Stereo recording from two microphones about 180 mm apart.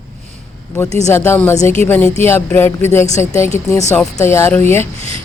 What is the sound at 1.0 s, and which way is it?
Speech, 15° left (ahead or behind).